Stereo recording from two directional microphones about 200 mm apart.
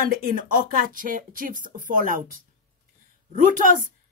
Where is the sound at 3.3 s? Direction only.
40° right (ahead or behind).